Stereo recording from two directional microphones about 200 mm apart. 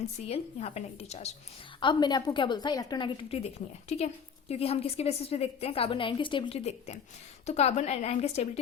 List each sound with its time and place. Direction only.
0.3 s a woman's voice: 30° left (ahead or behind)